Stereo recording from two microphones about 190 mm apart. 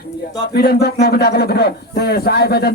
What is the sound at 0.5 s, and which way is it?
Speech, 55° left (ahead or behind).